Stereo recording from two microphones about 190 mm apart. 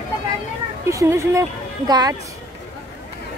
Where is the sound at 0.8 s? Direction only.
15° right (ahead or behind).